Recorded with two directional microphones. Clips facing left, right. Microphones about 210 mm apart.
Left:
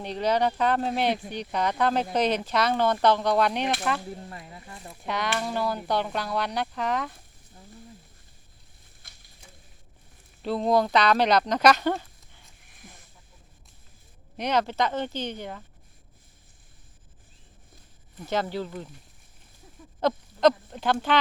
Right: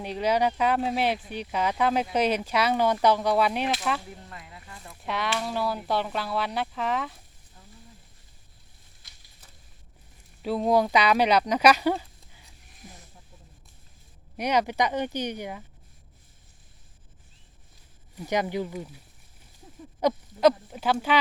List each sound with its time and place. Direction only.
0.0 s speech: 10° right (ahead or behind)
4.3 s a sound: 30° left (ahead or behind)
5.0 s speech: centre (ahead or behind)
9.0 s a sound: 50° left (ahead or behind)
10.4 s speech: 10° right (ahead or behind)
14.3 s speech: 10° right (ahead or behind)
18.2 s speech: 15° right (ahead or behind)
20.0 s speech: 10° right (ahead or behind)